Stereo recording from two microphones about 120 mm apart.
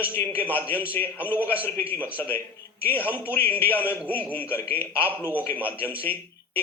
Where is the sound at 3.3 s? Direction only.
15° left (ahead or behind).